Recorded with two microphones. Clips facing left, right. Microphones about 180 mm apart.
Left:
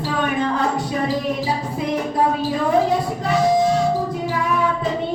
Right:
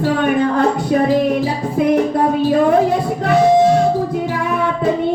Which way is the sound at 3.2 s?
60° right (ahead or behind).